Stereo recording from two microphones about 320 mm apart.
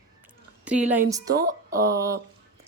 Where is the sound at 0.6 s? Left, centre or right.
Centre.